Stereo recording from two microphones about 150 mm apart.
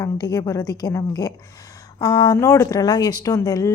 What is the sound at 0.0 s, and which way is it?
A woman's voice, 25° left (ahead or behind).